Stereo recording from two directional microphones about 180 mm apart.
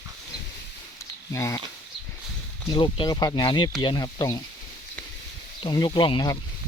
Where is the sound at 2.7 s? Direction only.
25° left (ahead or behind).